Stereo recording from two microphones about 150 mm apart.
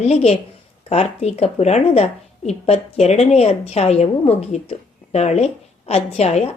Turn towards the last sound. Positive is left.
turn(degrees=45)  # may be behind; listen again after turning